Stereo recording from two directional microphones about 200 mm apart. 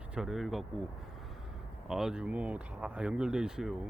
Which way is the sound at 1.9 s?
Centre (ahead or behind).